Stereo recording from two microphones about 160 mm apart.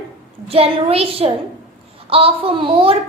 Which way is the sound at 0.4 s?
35° right (ahead or behind).